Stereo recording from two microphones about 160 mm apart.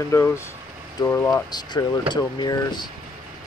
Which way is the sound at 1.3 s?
25° left (ahead or behind).